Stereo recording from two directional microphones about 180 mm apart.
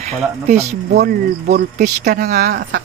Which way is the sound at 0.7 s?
40° right (ahead or behind).